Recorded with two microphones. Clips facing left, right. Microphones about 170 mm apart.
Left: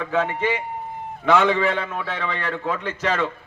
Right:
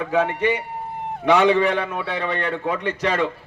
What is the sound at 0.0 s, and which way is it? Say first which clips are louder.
Speech: right 2 dB; 15° right (ahead or behind).